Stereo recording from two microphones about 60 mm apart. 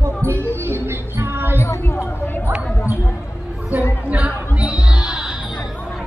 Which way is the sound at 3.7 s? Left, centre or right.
Right.